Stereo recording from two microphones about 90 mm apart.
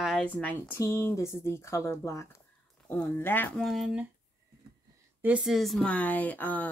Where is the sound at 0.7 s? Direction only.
30° left (ahead or behind).